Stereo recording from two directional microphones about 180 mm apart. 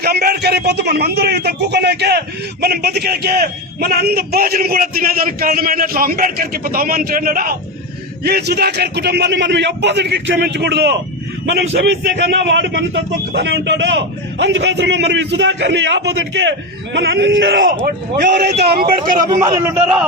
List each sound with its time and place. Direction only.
0.0 s a man's voice: 60° right (ahead or behind)
8.2 s a man's voice: 65° right (ahead or behind); by 17.7 s 90° right
17.8 s a man's voice: 45° right (ahead or behind)
18.3 s a man's voice: 65° right (ahead or behind)
19.5 s a man's voice: 15° right (ahead or behind)